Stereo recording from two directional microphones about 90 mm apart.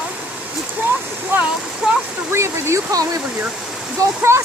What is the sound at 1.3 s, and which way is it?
Waterfall, 25° right (ahead or behind).